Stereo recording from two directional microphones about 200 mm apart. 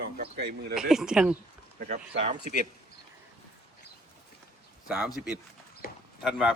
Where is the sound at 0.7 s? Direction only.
Centre (ahead or behind).